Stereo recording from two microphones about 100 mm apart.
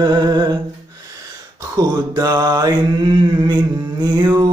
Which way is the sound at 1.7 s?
40° right (ahead or behind).